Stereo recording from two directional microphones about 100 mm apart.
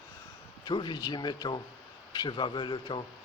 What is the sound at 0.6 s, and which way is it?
Speech, 50° left (ahead or behind).